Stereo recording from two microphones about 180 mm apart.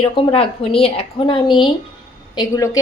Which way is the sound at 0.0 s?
30° left (ahead or behind).